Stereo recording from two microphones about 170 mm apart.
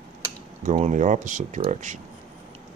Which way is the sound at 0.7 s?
45° right (ahead or behind).